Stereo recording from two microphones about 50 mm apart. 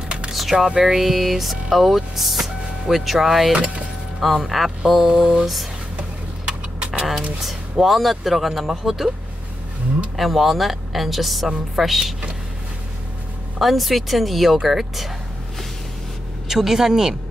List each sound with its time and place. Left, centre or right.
0.3 s a sound: centre
0.8 s speech: centre
3.5 s speech: right
4.2 s speech: centre
6.9 s a sound: centre
7.4 s speech: centre
10.1 s speech: centre
13.6 s speech: centre
16.4 s speech: centre